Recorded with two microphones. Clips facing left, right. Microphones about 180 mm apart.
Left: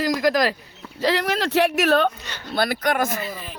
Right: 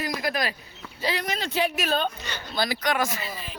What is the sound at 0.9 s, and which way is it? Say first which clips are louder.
Speech: left 7 dB; 90° left.